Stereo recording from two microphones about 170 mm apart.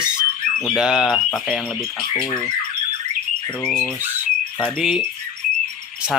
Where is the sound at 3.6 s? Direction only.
5° left (ahead or behind).